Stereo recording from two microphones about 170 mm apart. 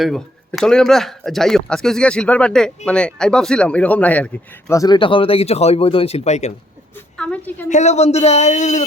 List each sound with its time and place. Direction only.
0.0 s speech: centre (ahead or behind)
4.7 s speech: 20° left (ahead or behind); by 6.5 s 40° left (ahead or behind)
7.2 s a woman's voice: 10° left (ahead or behind)
7.7 s speech: 40° left (ahead or behind)